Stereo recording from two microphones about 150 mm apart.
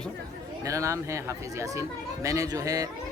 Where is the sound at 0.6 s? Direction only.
20° right (ahead or behind).